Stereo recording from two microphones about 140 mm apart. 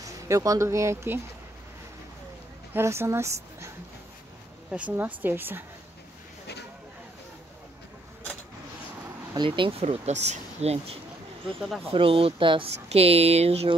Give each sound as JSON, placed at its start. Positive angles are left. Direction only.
{"t": 0.0, "sound": "speech", "side_deg": -25}
{"t": 2.7, "sound": "speech", "side_deg": -20}
{"t": 4.6, "sound": "speech", "side_deg": -10}
{"t": 9.3, "sound": "speech", "side_deg": -35}